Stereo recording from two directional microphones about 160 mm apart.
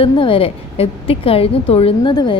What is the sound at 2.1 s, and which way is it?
Speech, 25° left (ahead or behind).